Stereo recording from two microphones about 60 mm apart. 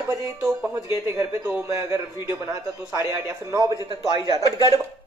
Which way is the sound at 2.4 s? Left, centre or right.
Right.